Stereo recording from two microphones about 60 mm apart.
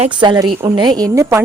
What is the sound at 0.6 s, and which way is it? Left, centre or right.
Speech, right.